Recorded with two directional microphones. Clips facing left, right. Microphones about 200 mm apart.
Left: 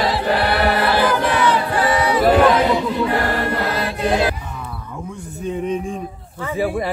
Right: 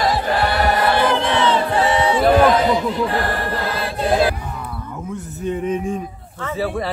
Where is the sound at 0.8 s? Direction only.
25° right (ahead or behind).